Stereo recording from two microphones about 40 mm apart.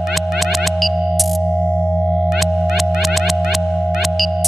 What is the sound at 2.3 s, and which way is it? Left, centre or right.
Music, centre.